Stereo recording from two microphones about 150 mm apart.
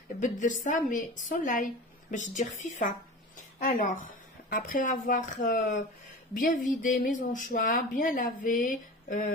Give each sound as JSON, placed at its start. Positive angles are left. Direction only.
{"t": 0.2, "sound": "speech", "side_deg": 55}